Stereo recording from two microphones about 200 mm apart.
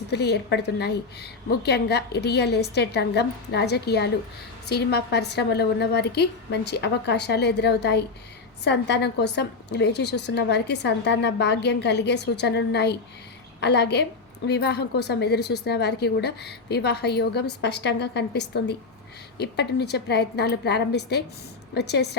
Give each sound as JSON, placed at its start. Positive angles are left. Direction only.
{"t": 0.1, "sound": "a woman's voice", "side_deg": 55}